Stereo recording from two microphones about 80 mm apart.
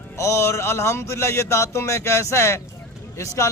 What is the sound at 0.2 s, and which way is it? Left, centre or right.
Speech, left.